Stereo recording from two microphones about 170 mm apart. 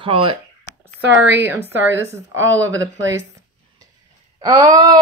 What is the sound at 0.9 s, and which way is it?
A woman's voice, 10° right (ahead or behind).